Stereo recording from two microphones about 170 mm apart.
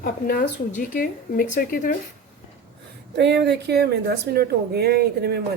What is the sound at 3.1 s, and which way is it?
A woman's voice, 90° right.